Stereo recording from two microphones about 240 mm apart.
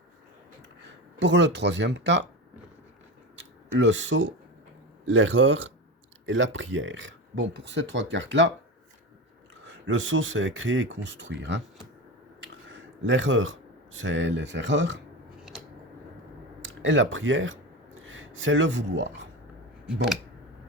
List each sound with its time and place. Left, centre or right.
1.2 s speech: right
3.8 s speech: right
9.6 s speech: right
12.6 s speech: right
15.5 s a sound: centre
16.6 s speech: right